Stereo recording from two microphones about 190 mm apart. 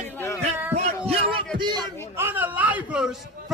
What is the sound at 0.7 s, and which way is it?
Music, 35° right (ahead or behind).